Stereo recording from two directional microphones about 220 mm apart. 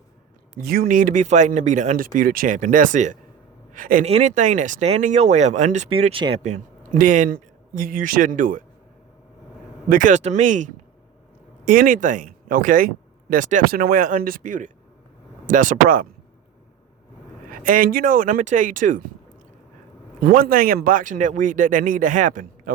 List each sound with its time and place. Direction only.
0.5 s speech: 40° right (ahead or behind)
9.9 s speech: 35° right (ahead or behind)
17.6 s speech: 40° right (ahead or behind)
20.2 s speech: 40° right (ahead or behind)